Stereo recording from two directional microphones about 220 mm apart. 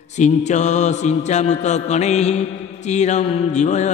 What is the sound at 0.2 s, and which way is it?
Mantra, 30° left (ahead or behind).